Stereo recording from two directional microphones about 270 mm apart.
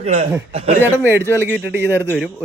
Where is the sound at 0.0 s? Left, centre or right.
Right.